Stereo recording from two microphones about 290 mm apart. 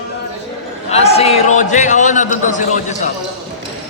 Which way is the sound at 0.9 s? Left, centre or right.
Left.